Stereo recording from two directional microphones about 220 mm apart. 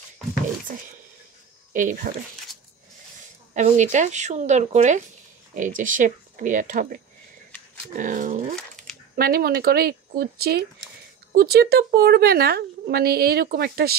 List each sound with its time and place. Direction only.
1.7 s speech: 35° right (ahead or behind)
3.5 s speech: 35° right (ahead or behind)
8.5 s a sound: centre (ahead or behind)
9.1 s a woman's voice: 45° right (ahead or behind)